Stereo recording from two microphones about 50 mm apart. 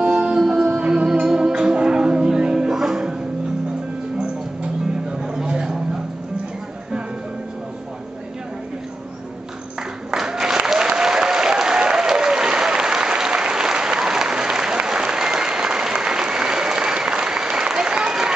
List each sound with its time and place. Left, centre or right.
0.0 s music: centre
0.7 s music: right
5.1 s a sound: centre
10.1 s applause: centre